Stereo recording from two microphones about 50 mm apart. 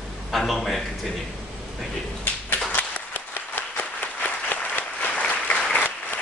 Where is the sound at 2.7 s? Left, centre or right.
Left.